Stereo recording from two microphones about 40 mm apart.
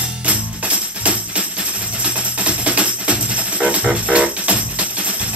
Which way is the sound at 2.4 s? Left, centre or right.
Right.